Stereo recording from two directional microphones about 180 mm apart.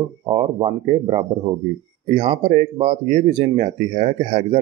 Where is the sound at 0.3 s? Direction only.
30° right (ahead or behind).